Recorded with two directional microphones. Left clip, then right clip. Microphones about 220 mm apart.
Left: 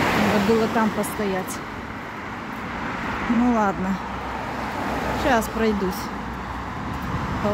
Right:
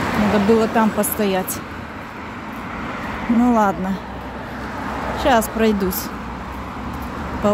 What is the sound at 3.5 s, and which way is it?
Speech, 10° right (ahead or behind).